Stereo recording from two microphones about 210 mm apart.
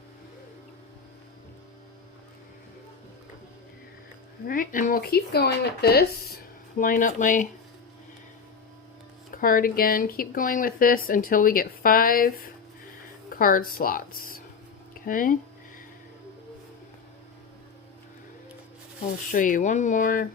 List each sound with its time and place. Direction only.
4.4 s speech: 40° left (ahead or behind)
9.3 s speech: 40° left (ahead or behind)
19.3 s speech: 40° left (ahead or behind)